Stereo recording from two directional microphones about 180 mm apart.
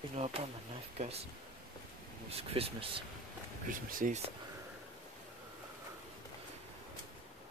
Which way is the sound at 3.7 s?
50° right (ahead or behind).